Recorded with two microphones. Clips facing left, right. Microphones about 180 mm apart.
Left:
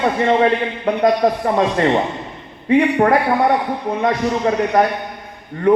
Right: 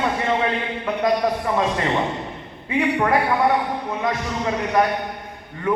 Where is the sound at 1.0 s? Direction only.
45° left (ahead or behind).